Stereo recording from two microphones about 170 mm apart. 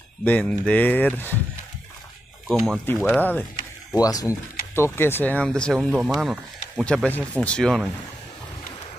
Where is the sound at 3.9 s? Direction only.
20° left (ahead or behind); by 7.9 s 5° left (ahead or behind).